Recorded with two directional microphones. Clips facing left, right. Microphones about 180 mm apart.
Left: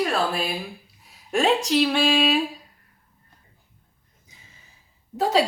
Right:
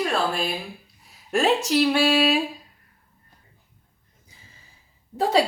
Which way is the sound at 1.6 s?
5° right (ahead or behind).